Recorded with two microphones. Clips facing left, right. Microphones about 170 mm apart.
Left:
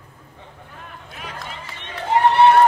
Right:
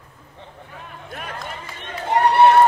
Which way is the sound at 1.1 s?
50° right (ahead or behind).